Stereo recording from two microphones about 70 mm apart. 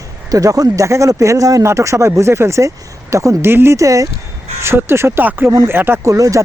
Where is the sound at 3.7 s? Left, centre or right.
Right.